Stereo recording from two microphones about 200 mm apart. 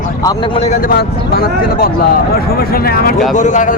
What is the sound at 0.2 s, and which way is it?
Speech, 15° left (ahead or behind).